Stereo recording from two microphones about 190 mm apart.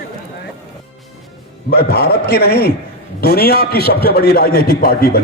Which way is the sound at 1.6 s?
55° left (ahead or behind).